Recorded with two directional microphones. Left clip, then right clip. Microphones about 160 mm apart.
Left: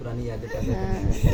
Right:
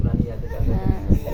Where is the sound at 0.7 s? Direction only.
25° left (ahead or behind).